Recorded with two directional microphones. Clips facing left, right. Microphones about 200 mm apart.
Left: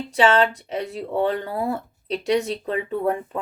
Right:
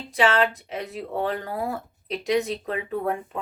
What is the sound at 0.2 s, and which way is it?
Speech, 30° left (ahead or behind).